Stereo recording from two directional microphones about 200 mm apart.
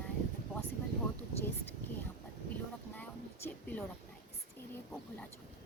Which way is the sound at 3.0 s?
10° left (ahead or behind).